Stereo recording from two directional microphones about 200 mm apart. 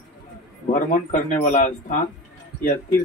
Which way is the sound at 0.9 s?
40° left (ahead or behind).